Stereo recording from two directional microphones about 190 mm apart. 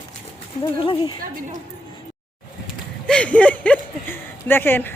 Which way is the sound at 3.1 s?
5° left (ahead or behind).